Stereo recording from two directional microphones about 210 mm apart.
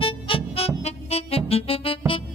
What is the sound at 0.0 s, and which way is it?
Music, 25° left (ahead or behind).